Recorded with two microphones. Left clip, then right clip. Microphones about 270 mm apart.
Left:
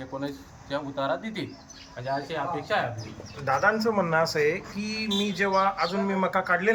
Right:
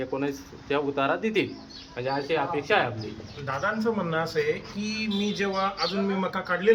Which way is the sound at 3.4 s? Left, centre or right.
Centre.